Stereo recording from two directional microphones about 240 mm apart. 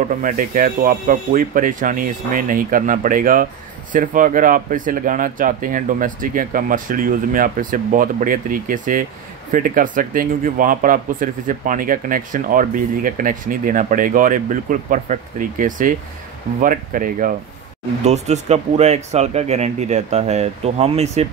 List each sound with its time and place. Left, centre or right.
0.2 s speech: right